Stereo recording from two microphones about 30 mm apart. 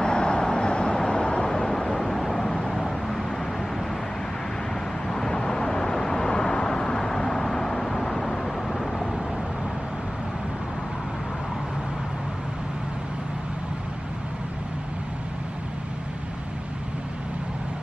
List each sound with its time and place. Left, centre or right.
0.0 s vehicle: left
1.5 s vehicle: centre
5.1 s vehicle: left